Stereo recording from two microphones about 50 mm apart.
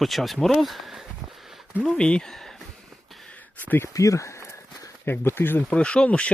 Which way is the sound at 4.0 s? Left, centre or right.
Left.